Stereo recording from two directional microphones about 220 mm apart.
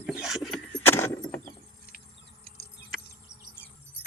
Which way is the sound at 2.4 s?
45° left (ahead or behind).